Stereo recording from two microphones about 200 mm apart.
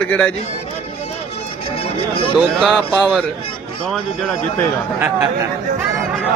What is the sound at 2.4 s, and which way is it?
Speech, 5° right (ahead or behind).